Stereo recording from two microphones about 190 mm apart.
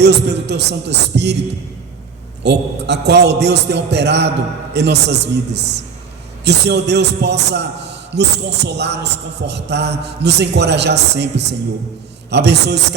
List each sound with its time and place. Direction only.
0.0 s a man's voice: 60° right (ahead or behind)
2.4 s a man's voice: 60° right (ahead or behind)